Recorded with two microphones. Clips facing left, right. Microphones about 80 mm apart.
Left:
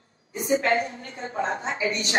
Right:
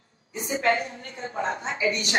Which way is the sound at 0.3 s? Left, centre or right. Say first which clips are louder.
Left 7 dB; left.